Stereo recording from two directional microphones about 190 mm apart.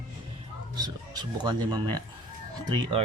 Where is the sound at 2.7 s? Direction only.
25° right (ahead or behind).